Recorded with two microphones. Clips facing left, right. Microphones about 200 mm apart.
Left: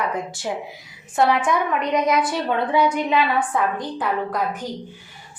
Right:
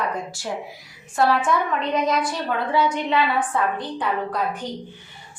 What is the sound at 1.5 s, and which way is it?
A woman's voice, 15° left (ahead or behind).